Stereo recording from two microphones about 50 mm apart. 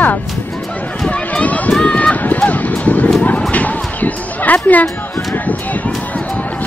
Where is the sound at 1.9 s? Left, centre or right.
Left.